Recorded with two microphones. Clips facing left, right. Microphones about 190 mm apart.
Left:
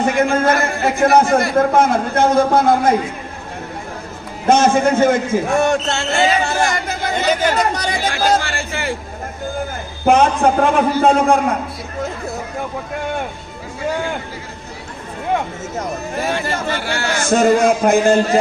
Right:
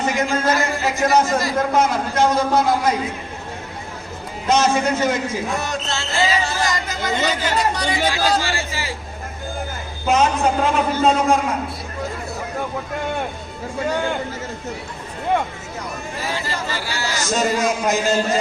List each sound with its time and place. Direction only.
0.1 s a man's voice: 55° left (ahead or behind)
4.4 s a man's voice: 50° left (ahead or behind)
10.1 s a man's voice: 55° left (ahead or behind)
16.1 s a man's voice: 55° left (ahead or behind)